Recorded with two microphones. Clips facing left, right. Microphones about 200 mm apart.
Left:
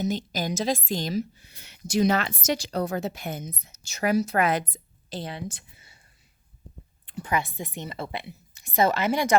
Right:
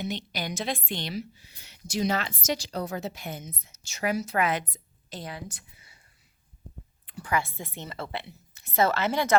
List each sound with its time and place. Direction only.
0.0 s a woman's voice: 40° left (ahead or behind)
1.6 s a woman's voice: 60° left (ahead or behind)
3.4 s a woman's voice: 40° left (ahead or behind)
7.0 s a woman's voice: 25° left (ahead or behind)